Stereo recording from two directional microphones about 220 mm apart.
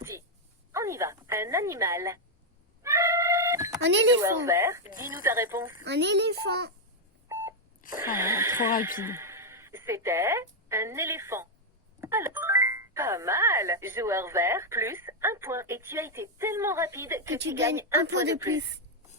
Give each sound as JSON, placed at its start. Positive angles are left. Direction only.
{"t": 0.7, "sound": "speech", "side_deg": -15}
{"t": 2.8, "sound": "music", "side_deg": -15}
{"t": 3.8, "sound": "speech", "side_deg": -55}
{"t": 4.2, "sound": "speech", "side_deg": -10}
{"t": 5.8, "sound": "a child's voice", "side_deg": -50}
{"t": 7.9, "sound": "speech", "side_deg": -15}